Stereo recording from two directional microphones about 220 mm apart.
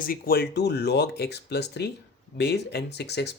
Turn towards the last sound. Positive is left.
turn(degrees=50)  # may be behind; listen again after turning